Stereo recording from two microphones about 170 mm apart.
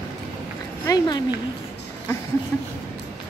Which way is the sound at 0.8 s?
20° left (ahead or behind).